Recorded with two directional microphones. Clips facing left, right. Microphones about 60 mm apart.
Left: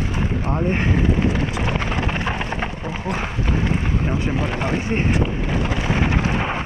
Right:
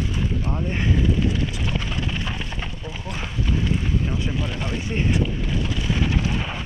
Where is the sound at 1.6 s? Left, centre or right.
Left.